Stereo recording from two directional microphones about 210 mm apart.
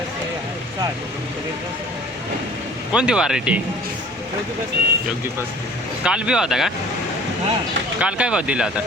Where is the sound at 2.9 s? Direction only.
5° right (ahead or behind).